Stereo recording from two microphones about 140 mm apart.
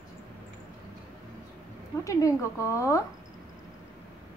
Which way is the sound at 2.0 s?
20° left (ahead or behind).